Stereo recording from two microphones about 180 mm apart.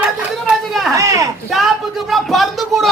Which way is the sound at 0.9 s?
20° right (ahead or behind).